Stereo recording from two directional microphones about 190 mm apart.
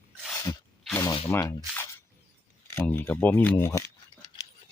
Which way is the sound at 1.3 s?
15° left (ahead or behind).